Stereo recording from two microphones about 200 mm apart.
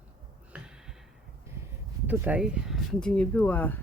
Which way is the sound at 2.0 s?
10° right (ahead or behind).